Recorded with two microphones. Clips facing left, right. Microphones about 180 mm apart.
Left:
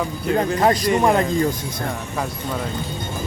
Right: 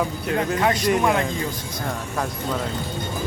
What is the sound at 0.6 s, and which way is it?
Speech, 40° left (ahead or behind).